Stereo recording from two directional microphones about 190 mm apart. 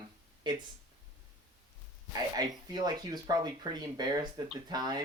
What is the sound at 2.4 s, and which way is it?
Speech, 20° right (ahead or behind).